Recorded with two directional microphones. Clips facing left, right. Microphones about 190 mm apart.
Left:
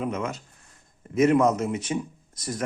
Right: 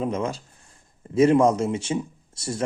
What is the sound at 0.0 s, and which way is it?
Speech, 30° right (ahead or behind).